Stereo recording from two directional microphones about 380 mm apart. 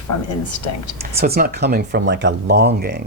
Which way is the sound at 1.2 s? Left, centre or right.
Right.